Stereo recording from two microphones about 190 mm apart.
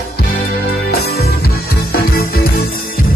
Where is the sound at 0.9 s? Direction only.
55° left (ahead or behind).